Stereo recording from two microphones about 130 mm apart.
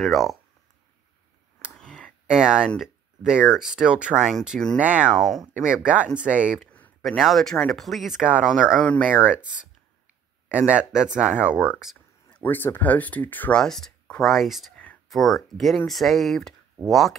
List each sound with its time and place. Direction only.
0.0 s speech: centre (ahead or behind)
1.8 s a sound: 5° left (ahead or behind)
2.2 s speech: 5° right (ahead or behind)
4.7 s speech: 10° right (ahead or behind)
5.1 s speech: centre (ahead or behind)
8.8 s speech: 10° left (ahead or behind)
9.1 s speech: 10° right (ahead or behind)
10.7 s speech: 5° right (ahead or behind)